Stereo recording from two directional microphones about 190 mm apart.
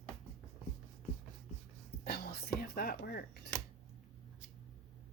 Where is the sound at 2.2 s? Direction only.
55° left (ahead or behind).